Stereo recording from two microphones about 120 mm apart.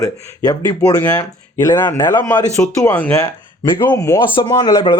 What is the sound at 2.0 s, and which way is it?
Speech, 30° left (ahead or behind).